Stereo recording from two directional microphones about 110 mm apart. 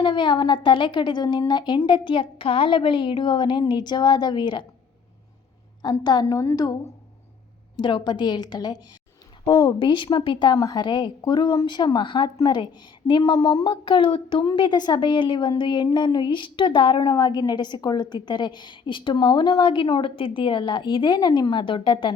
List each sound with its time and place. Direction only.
0.0 s a woman's voice: 40° left (ahead or behind)
5.8 s a woman's voice: 40° left (ahead or behind)
7.8 s a woman's voice: 45° left (ahead or behind)
17.0 s a woman's voice: 35° left (ahead or behind); by 22.1 s 50° left (ahead or behind)